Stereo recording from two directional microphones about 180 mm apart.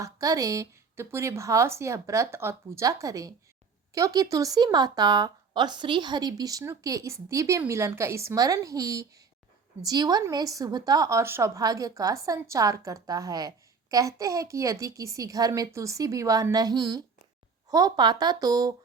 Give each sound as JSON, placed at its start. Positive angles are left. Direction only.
{"t": 0.0, "sound": "speech", "side_deg": -20}